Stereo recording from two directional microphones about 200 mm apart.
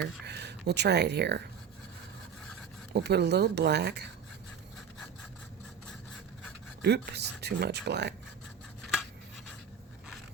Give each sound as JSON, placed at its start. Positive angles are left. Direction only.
{"t": 0.0, "sound": "speech", "side_deg": -55}
{"t": 2.9, "sound": "speech", "side_deg": -55}
{"t": 6.8, "sound": "speech", "side_deg": -55}